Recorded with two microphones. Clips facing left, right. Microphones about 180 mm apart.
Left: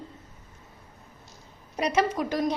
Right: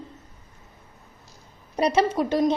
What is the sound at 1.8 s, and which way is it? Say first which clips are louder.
Speech: right 4 dB; 30° right (ahead or behind).